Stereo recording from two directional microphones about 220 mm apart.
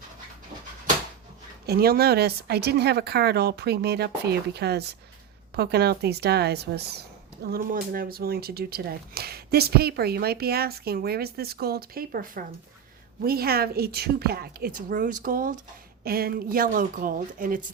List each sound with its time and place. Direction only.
1.6 s a woman's voice: 45° right (ahead or behind)